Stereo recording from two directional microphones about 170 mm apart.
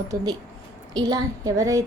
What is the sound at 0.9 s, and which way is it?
Speech, 25° right (ahead or behind).